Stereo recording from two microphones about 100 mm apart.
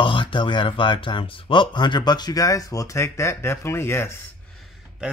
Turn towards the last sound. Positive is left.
turn(degrees=-10)  # may be behind; listen again after turning